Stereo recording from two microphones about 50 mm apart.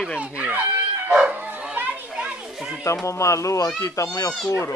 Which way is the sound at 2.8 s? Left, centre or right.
Left.